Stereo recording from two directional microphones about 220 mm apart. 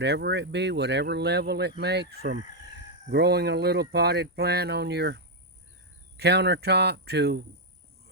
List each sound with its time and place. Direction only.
0.0 s speech: 50° right (ahead or behind)